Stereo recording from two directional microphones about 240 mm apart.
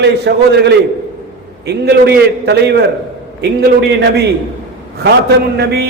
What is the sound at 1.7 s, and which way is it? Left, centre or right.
A man's voice, right.